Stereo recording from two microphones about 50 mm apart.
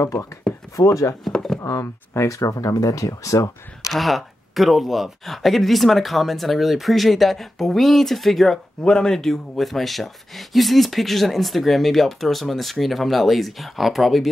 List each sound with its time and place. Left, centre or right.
0.0 s speech: left
3.9 s speech: centre
8.8 s speech: centre